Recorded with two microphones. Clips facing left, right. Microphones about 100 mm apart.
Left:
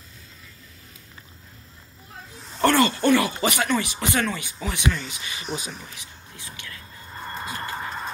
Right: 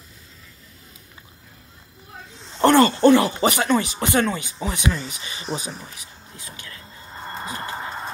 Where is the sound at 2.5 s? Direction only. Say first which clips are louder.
Right 5 dB; 25° right (ahead or behind).